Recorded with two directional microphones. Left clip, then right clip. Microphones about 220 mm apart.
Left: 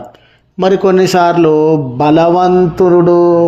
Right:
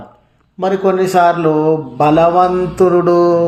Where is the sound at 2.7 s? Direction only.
15° left (ahead or behind).